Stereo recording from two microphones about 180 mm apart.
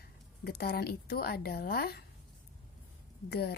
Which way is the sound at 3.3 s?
60° left (ahead or behind).